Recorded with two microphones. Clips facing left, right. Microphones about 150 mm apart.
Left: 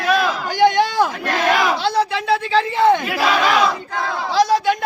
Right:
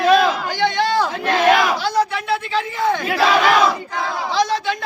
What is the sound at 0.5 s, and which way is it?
Speech, 15° left (ahead or behind).